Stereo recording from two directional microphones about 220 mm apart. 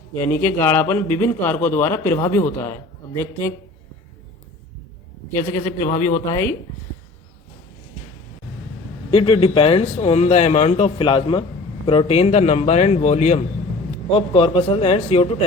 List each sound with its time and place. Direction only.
0.2 s a man's voice: 10° left (ahead or behind)
5.4 s a man's voice: 15° left (ahead or behind)
9.0 s a man's voice: 25° left (ahead or behind)